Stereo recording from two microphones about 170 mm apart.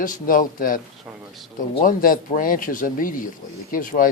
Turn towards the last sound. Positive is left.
turn(degrees=55)  # may be behind; listen again after turning